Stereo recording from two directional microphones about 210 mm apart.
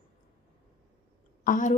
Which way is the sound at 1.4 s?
35° left (ahead or behind).